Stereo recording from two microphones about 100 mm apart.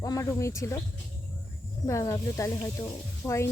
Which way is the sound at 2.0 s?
30° left (ahead or behind).